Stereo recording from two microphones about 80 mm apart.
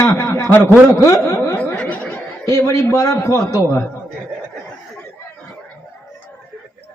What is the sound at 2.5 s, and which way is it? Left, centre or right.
A man's voice, left.